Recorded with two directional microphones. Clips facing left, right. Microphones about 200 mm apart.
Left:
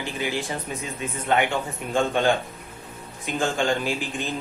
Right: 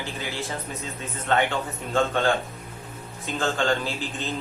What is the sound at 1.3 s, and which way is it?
Speech, 10° left (ahead or behind).